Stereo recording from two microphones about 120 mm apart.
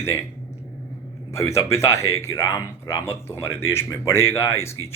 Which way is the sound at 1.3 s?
25° left (ahead or behind).